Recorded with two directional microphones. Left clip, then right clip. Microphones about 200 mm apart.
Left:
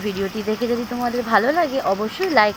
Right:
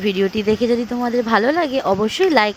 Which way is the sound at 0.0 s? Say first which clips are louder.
Right 6 dB; 55° right (ahead or behind).